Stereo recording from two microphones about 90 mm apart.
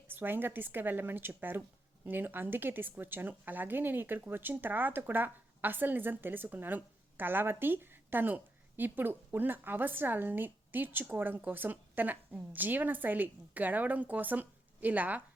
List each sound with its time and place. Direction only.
0.1 s a woman's voice: 25° right (ahead or behind)